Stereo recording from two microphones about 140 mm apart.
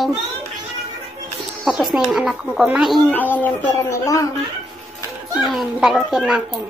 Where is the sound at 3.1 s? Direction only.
10° left (ahead or behind).